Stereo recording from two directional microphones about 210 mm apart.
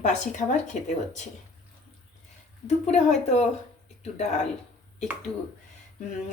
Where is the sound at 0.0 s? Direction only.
35° left (ahead or behind).